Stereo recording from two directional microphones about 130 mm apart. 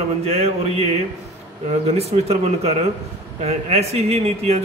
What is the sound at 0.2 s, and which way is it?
A man's voice, 55° right (ahead or behind).